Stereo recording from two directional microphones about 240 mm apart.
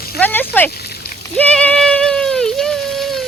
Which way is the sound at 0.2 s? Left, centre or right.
Centre.